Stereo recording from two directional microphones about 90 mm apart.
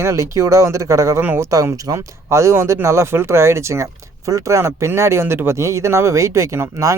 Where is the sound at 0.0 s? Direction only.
35° right (ahead or behind).